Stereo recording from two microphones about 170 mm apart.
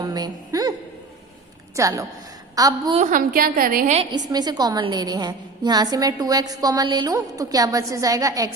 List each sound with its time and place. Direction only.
0.0 s a sound: 20° right (ahead or behind)
1.7 s a woman's voice: 20° right (ahead or behind)
2.9 s a woman's voice: 50° right (ahead or behind)
4.3 s a woman's voice: 25° right (ahead or behind)